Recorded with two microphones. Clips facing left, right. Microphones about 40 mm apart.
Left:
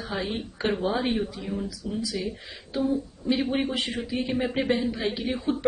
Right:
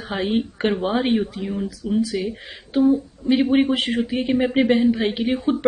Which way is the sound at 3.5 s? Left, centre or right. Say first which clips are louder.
Right 9 dB; right.